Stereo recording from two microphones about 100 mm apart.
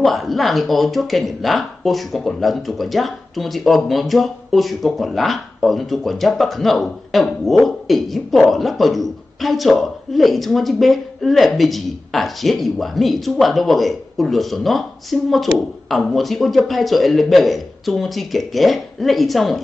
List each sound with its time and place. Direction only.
0.0 s speech: centre (ahead or behind)